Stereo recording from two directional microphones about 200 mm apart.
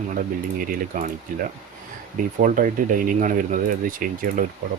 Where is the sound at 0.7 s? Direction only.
45° right (ahead or behind).